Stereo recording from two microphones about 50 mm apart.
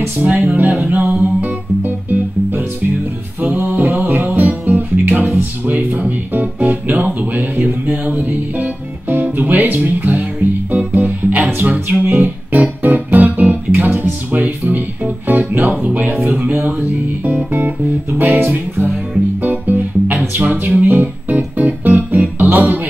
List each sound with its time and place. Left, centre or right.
0.2 s music: right
3.3 s music: right
13.8 s music: right
14.3 s music: right
19.4 s music: right